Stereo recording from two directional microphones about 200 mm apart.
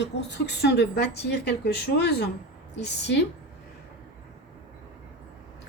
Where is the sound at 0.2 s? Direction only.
60° left (ahead or behind).